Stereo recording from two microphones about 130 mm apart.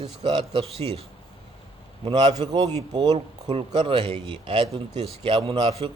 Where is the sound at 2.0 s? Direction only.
35° right (ahead or behind).